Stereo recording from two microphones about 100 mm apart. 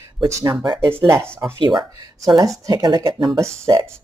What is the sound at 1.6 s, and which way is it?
Speech, 45° right (ahead or behind).